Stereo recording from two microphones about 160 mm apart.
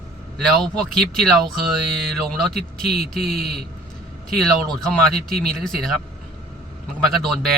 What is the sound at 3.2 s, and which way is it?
Speech, 70° right (ahead or behind).